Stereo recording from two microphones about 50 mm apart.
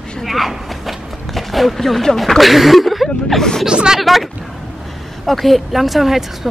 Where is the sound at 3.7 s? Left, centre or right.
Centre.